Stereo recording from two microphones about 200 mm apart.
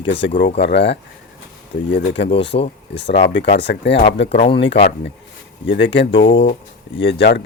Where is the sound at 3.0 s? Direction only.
60° left (ahead or behind).